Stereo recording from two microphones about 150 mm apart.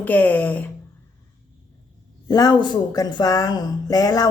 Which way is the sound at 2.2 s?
25° left (ahead or behind).